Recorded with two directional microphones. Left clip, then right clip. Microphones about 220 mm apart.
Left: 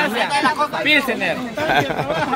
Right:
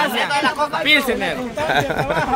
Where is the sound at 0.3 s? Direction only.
30° right (ahead or behind).